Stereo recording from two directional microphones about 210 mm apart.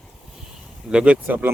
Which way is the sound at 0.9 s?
5° right (ahead or behind).